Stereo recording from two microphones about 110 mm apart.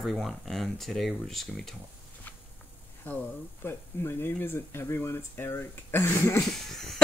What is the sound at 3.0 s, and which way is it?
Speech, 15° left (ahead or behind).